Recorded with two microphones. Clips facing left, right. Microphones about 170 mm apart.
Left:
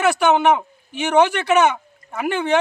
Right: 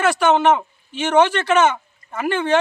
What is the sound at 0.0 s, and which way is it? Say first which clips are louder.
Speech: even; 10° left (ahead or behind).